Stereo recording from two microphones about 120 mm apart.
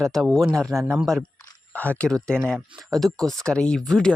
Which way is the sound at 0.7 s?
25° right (ahead or behind).